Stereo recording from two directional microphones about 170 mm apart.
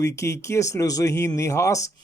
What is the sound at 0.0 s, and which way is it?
Speech, 15° left (ahead or behind).